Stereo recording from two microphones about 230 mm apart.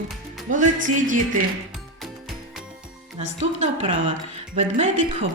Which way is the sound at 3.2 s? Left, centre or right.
Right.